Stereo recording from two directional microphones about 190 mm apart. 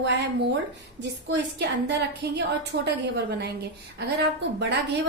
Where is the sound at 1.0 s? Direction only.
65° right (ahead or behind).